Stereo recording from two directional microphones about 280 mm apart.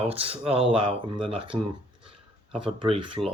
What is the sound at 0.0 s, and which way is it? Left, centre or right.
Speech, centre.